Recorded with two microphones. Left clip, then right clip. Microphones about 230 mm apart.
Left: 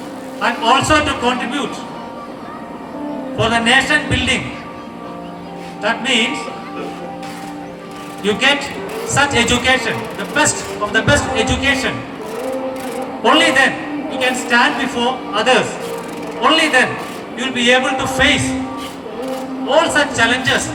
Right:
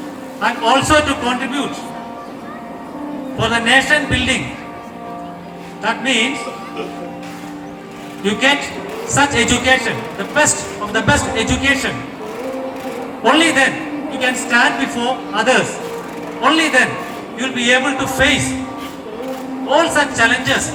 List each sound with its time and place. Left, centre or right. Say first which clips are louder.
0.4 s a man's voice: even; left
3.3 s a man's voice: even; left
5.8 s a man's voice: left 1 dB; left
8.2 s a man's voice: even; left
13.2 s a man's voice: left 1 dB; left
19.7 s a man's voice: even; left